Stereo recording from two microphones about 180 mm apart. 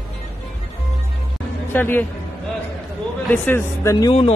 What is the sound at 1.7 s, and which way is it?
Speech, 10° left (ahead or behind).